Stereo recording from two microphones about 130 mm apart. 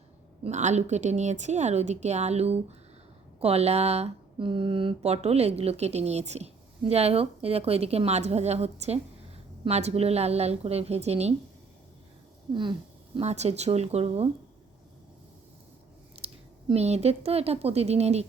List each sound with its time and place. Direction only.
0.4 s a woman's voice: 65° right (ahead or behind)
13.1 s a woman's voice: 60° right (ahead or behind)
16.1 s speech: 50° right (ahead or behind)